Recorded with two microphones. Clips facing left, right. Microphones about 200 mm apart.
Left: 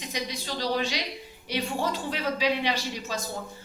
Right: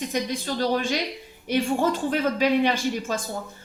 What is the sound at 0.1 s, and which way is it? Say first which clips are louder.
Speech: right 6 dB; 50° right (ahead or behind).